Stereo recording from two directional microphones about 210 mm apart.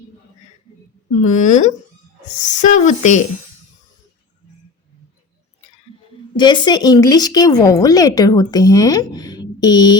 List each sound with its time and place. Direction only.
1.2 s speech: 35° left (ahead or behind)
6.3 s a woman's voice: 20° left (ahead or behind)